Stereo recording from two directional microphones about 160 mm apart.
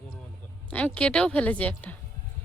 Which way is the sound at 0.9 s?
5° left (ahead or behind).